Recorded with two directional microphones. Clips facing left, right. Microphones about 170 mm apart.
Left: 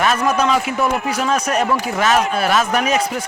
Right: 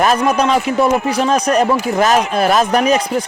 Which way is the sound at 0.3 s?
35° right (ahead or behind).